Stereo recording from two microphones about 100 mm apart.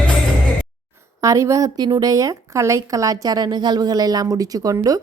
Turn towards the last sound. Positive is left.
turn(degrees=-35)  # may be behind; listen again after turning